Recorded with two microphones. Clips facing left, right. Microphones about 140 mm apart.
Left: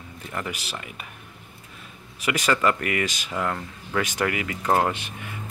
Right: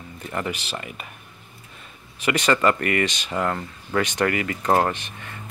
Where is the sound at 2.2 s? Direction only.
5° left (ahead or behind).